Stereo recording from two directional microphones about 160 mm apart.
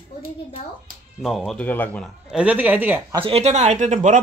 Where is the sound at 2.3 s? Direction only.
10° right (ahead or behind).